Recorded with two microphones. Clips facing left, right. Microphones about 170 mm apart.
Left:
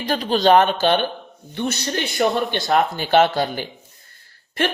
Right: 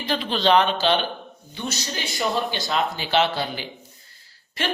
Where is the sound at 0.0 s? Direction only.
40° left (ahead or behind); by 2.1 s 60° left (ahead or behind).